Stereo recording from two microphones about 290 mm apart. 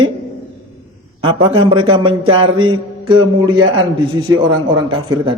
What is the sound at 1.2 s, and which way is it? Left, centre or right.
Speech, centre.